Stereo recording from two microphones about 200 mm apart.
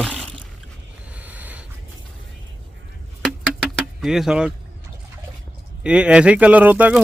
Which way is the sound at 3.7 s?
5° right (ahead or behind).